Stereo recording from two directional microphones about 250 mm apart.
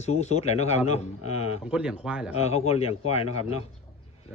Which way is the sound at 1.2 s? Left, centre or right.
Left.